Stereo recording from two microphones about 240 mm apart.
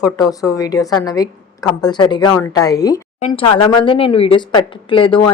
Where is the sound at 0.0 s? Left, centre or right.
Centre.